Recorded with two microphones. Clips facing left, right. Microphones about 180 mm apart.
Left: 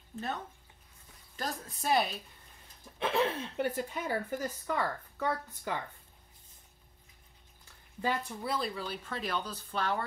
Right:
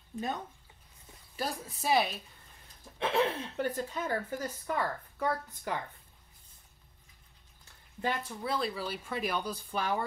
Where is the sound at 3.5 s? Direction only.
10° left (ahead or behind).